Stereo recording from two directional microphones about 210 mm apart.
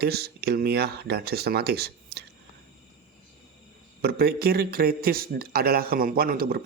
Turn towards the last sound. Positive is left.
turn(degrees=-45)  # may be behind; listen again after turning